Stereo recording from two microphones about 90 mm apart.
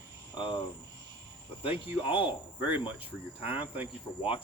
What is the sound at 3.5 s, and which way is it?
Speech, 20° right (ahead or behind).